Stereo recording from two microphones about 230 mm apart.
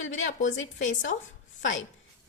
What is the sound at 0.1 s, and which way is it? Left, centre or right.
Speech, left.